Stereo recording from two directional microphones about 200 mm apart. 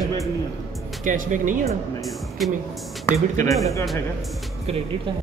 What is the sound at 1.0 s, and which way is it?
Speech, 40° right (ahead or behind).